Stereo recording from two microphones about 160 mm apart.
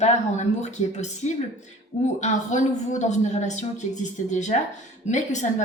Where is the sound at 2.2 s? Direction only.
50° left (ahead or behind).